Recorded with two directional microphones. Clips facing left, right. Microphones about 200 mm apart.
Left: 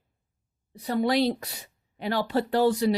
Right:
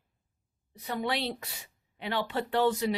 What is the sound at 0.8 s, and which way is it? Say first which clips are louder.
A woman's voice: left 8 dB; 35° left (ahead or behind).